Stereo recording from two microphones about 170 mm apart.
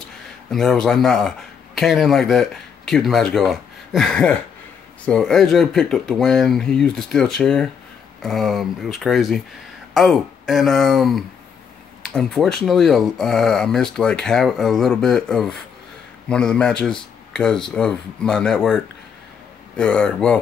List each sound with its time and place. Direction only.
0.5 s speech: centre (ahead or behind)
17.3 s a sound: 5° left (ahead or behind)
17.7 s speech: 5° left (ahead or behind)
19.8 s speech: 5° left (ahead or behind)